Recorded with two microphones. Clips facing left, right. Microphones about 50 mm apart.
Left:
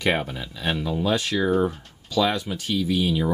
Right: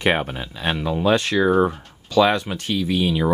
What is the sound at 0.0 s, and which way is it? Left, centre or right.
Speech, right.